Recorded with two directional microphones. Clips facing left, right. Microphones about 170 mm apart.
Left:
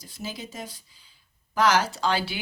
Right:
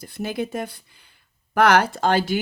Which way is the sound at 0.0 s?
60° right (ahead or behind).